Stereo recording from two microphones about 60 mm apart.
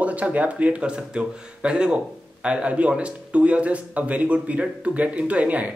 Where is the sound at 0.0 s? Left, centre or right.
Right.